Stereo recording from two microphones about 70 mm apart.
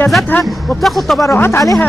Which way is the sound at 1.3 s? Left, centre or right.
Left.